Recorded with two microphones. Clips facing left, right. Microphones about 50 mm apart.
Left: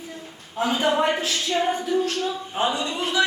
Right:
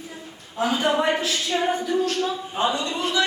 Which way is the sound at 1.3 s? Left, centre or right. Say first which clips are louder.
Even; centre.